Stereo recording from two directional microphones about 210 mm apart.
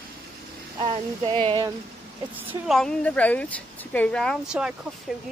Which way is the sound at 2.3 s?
Centre (ahead or behind).